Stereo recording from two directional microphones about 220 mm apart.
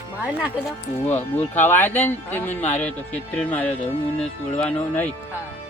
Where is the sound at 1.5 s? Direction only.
10° left (ahead or behind).